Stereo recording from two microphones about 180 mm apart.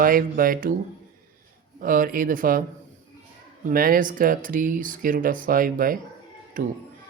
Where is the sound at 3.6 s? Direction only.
50° right (ahead or behind).